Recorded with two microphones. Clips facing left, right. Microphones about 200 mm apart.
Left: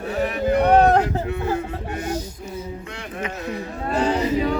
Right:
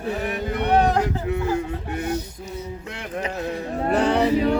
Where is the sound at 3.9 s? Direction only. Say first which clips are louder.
Right 2 dB; 65° right (ahead or behind).